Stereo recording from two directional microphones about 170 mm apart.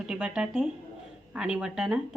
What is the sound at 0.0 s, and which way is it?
Speech, 5° right (ahead or behind).